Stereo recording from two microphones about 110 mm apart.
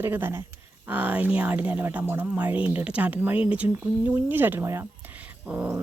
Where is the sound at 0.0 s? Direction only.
20° right (ahead or behind).